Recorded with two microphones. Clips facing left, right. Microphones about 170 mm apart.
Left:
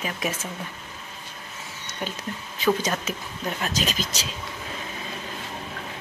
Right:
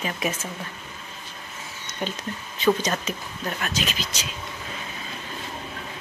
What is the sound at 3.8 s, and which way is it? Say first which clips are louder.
Speech: left 2 dB; 40° left (ahead or behind).